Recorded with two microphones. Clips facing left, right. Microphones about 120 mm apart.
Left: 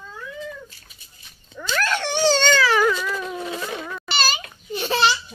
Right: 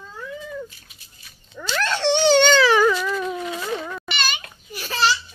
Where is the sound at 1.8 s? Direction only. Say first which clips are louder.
Right 2 dB; 25° right (ahead or behind).